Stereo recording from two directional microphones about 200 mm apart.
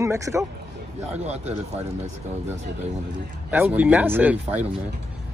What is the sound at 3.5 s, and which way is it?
Speech, 10° right (ahead or behind).